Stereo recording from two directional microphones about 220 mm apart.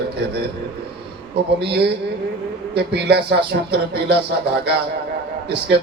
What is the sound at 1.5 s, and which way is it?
A man's voice, 50° right (ahead or behind).